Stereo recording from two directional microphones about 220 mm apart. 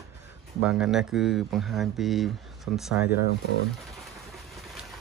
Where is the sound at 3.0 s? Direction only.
45° left (ahead or behind).